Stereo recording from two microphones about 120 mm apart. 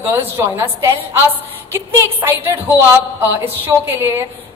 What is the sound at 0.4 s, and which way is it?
Speech, 25° right (ahead or behind).